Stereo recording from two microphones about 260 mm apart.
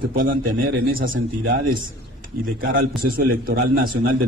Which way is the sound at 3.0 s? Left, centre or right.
Right.